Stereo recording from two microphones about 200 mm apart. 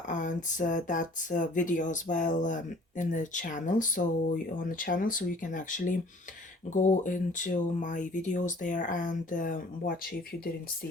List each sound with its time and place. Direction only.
0.1 s speech: 40° left (ahead or behind)